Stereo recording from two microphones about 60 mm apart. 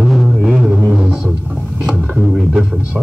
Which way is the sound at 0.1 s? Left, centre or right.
Centre.